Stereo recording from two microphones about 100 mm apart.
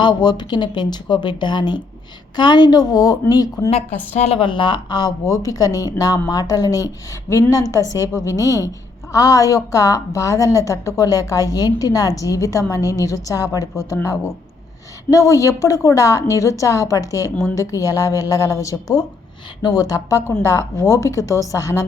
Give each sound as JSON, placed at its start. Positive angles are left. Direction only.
{"t": 0.0, "sound": "a woman's voice", "side_deg": 50}
{"t": 4.2, "sound": "a woman's voice", "side_deg": 70}